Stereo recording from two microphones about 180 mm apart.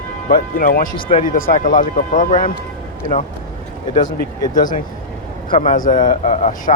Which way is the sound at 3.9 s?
45° left (ahead or behind).